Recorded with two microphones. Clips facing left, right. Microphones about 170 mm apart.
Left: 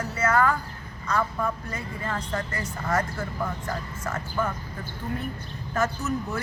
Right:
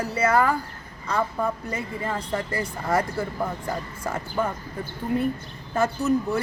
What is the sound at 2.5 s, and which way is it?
Speech, 30° right (ahead or behind).